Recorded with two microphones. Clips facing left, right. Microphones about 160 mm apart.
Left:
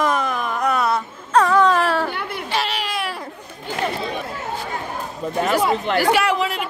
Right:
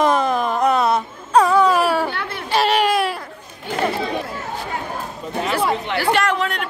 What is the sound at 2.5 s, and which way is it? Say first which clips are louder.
Baby cry: right 9 dB; 45° right (ahead or behind).